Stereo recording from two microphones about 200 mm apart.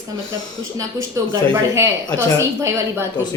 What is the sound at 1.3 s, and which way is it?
A woman's voice, 15° right (ahead or behind).